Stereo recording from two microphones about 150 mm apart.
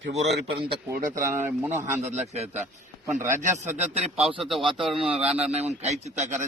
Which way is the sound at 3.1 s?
15° right (ahead or behind).